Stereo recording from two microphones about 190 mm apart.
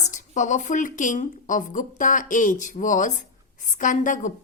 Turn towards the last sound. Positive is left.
turn(degrees=40)  # may be behind; listen again after turning